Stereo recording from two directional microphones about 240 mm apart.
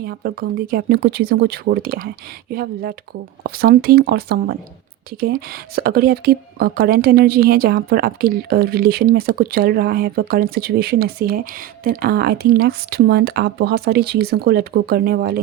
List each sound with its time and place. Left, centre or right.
0.0 s speech: right